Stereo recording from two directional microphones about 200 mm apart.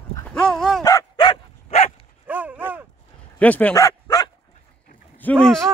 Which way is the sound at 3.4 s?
5° left (ahead or behind).